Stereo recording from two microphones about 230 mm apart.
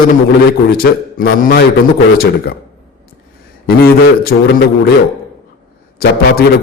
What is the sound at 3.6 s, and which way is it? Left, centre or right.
Speech, left.